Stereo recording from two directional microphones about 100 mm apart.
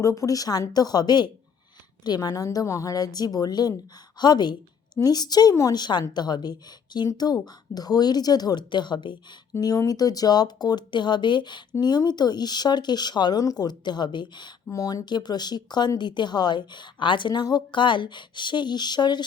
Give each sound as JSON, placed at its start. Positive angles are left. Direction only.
{"t": 0.0, "sound": "a woman's voice", "side_deg": 35}
{"t": 9.6, "sound": "a woman's voice", "side_deg": 40}
{"t": 14.7, "sound": "a woman's voice", "side_deg": 35}